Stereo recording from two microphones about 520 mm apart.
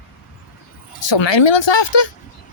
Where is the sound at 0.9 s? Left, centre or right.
Left.